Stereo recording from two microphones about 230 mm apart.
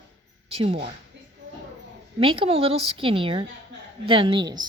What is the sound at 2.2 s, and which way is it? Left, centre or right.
A woman's voice, right.